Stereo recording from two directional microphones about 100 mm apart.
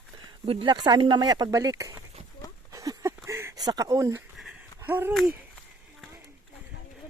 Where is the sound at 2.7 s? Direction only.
35° right (ahead or behind).